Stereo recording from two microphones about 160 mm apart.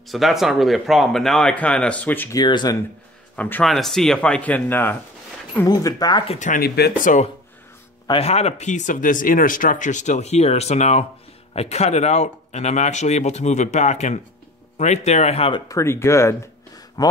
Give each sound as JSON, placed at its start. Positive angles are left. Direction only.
{"t": 0.1, "sound": "speech", "side_deg": 0}
{"t": 2.3, "sound": "speech", "side_deg": 25}
{"t": 3.3, "sound": "speech", "side_deg": 10}
{"t": 5.7, "sound": "speech", "side_deg": 25}
{"t": 6.2, "sound": "speech", "side_deg": 45}
{"t": 6.6, "sound": "speech", "side_deg": 85}
{"t": 8.1, "sound": "speech", "side_deg": 40}
{"t": 15.7, "sound": "speech", "side_deg": 15}